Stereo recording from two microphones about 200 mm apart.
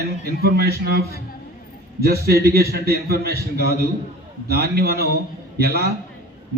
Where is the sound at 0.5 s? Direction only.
50° right (ahead or behind).